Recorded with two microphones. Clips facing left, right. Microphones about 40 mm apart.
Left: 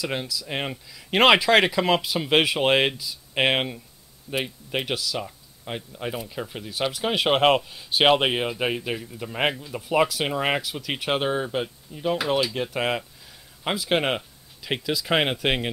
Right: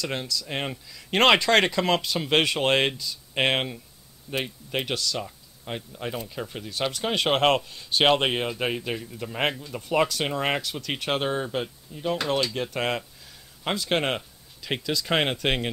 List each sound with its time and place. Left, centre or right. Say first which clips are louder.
0.0 s speech: left 1 dB; centre